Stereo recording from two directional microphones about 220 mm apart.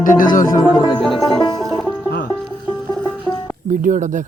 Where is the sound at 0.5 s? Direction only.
20° left (ahead or behind).